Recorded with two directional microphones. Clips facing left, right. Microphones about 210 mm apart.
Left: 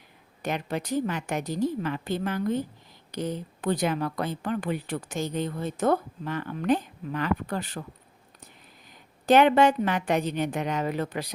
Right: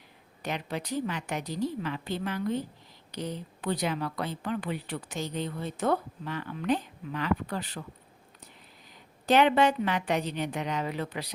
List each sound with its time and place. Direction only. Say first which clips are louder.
0.4 s speech: left 4 dB; 50° left (ahead or behind)
9.2 s speech: left 4 dB; 50° left (ahead or behind)